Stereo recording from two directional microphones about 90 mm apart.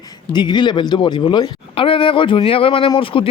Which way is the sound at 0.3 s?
55° left (ahead or behind).